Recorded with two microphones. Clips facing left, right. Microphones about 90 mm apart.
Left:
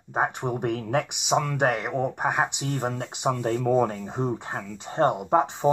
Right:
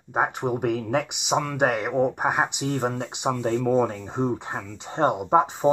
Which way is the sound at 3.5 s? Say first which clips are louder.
Right 1 dB; 10° left (ahead or behind).